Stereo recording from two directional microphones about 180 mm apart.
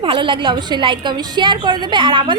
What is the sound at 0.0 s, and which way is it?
A woman's voice, 30° right (ahead or behind).